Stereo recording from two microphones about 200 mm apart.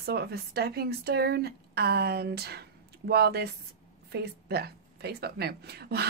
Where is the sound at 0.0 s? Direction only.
55° right (ahead or behind).